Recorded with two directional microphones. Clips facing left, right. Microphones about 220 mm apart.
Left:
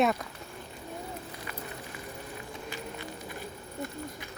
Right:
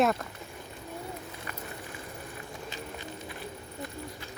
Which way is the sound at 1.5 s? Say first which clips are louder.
Left 1 dB; 45° right (ahead or behind).